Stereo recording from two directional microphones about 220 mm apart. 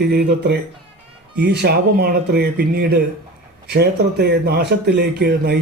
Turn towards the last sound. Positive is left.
turn(degrees=-45)  # may be behind; listen again after turning